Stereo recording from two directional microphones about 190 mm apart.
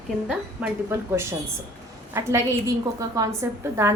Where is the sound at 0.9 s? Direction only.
15° right (ahead or behind).